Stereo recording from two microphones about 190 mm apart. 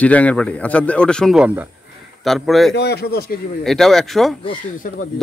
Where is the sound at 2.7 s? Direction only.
55° left (ahead or behind).